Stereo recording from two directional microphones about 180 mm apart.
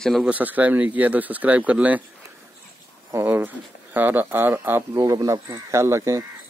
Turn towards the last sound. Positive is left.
turn(degrees=-15)  # may be behind; listen again after turning